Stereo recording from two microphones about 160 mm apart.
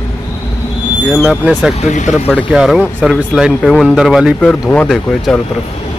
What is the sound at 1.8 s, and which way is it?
Speech, 45° left (ahead or behind).